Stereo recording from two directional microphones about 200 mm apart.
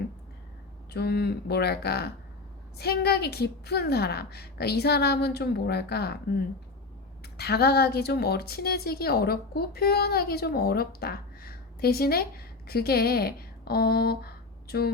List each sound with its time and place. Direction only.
0.9 s a woman's voice: 55° left (ahead or behind)